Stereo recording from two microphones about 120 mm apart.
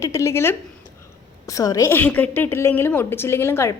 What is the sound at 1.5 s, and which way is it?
A woman's voice, 30° left (ahead or behind).